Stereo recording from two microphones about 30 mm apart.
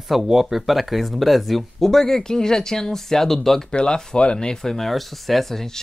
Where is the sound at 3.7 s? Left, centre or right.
Left.